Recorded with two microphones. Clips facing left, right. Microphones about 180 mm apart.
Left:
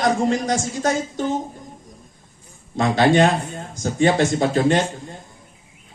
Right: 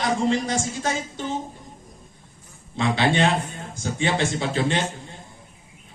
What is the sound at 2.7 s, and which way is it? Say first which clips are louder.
A man's voice: left 5 dB; 45° left (ahead or behind).